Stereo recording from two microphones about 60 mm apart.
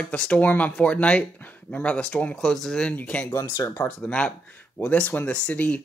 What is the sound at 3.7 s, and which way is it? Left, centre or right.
Speech, left.